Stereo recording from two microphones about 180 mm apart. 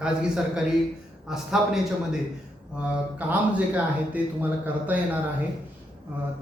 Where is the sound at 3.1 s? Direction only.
10° right (ahead or behind).